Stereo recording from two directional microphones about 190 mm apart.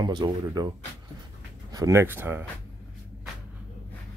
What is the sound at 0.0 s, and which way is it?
Speech, 25° right (ahead or behind).